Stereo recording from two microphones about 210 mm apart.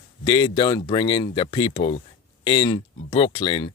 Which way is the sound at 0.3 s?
25° left (ahead or behind).